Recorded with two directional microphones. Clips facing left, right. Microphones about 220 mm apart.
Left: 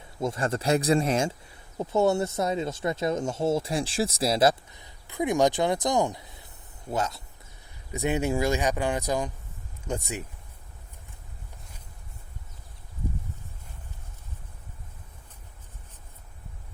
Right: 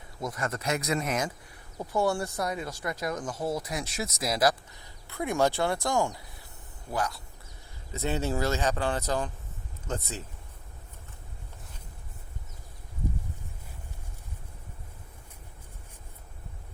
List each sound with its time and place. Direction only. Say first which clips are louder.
0.2 s speech: left 5 dB; 30° left (ahead or behind)